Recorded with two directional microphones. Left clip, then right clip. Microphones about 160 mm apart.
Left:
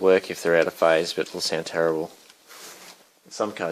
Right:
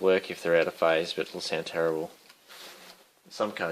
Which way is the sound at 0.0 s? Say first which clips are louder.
Left 6 dB; 40° left (ahead or behind).